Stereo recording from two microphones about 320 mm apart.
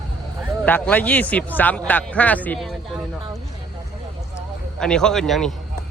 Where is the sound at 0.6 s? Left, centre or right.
Centre.